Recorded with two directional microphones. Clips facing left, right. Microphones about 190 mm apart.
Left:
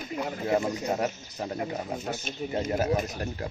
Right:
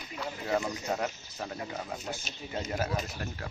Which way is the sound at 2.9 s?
45° left (ahead or behind).